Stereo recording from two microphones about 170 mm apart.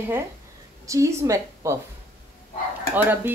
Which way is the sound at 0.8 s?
20° right (ahead or behind).